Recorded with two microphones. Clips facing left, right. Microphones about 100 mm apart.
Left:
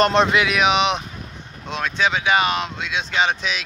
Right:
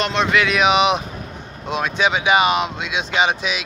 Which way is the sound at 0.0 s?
35° left (ahead or behind).